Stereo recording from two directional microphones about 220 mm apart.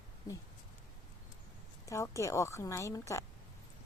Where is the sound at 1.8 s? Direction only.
15° left (ahead or behind).